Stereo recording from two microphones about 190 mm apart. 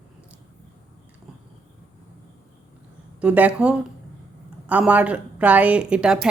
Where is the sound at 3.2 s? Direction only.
5° right (ahead or behind).